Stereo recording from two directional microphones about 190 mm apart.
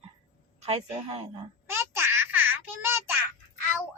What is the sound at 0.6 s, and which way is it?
Speech, 35° right (ahead or behind).